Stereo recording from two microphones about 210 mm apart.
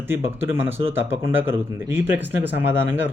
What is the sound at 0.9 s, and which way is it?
Speech, 10° right (ahead or behind).